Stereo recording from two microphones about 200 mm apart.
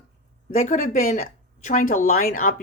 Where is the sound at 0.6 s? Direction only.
40° left (ahead or behind).